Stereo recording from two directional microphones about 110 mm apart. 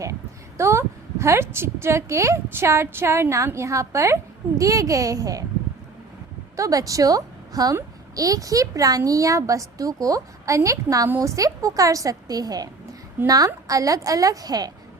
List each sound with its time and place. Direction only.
0.0 s a woman's voice: 30° right (ahead or behind)
6.6 s a woman's voice: 30° right (ahead or behind)